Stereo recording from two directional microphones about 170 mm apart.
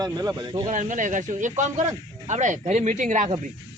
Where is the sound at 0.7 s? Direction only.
45° right (ahead or behind).